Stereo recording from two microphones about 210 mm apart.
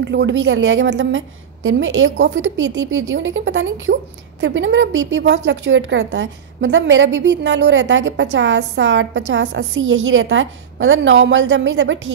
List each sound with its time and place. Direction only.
0.0 s a woman's voice: 55° right (ahead or behind)